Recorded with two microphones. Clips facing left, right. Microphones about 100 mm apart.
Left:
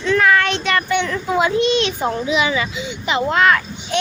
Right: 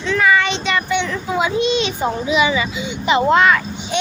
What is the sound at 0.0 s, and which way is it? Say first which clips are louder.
Child singing: left 1 dB; centre (ahead or behind).